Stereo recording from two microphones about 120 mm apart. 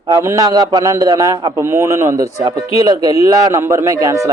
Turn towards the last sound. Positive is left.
turn(degrees=-25)  # may be behind; listen again after turning